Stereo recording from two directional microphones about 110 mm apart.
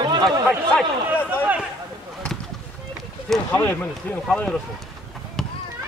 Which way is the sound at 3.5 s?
20° left (ahead or behind).